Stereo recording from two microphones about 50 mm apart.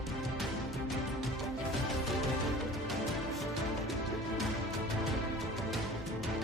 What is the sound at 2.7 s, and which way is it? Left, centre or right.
Music, centre.